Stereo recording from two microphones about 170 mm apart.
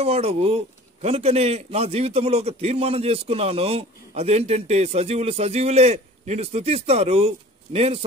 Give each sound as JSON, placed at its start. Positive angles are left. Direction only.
{"t": 0.0, "sound": "a man's voice", "side_deg": -40}